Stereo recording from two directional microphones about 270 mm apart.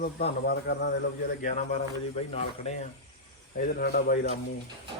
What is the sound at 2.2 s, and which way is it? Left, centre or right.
Speech, left.